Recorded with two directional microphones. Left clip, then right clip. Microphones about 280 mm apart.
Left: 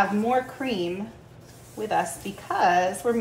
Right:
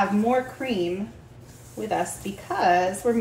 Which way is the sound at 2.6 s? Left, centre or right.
Centre.